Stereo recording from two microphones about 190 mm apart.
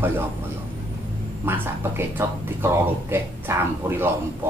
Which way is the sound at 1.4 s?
10° right (ahead or behind).